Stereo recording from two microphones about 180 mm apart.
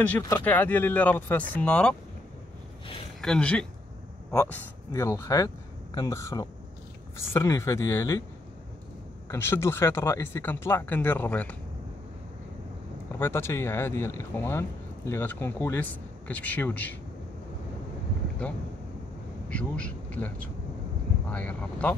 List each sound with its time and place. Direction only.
0.4 s speech: 10° left (ahead or behind)
3.2 s speech: 5° left (ahead or behind)
9.3 s speech: 15° left (ahead or behind)
13.2 s speech: 15° left (ahead or behind)
19.5 s speech: 5° left (ahead or behind)